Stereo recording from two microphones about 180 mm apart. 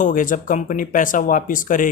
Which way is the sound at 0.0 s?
45° left (ahead or behind).